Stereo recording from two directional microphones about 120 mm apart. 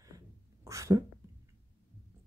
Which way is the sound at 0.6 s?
25° right (ahead or behind).